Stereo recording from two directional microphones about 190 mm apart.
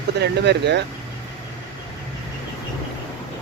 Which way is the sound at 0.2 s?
60° right (ahead or behind).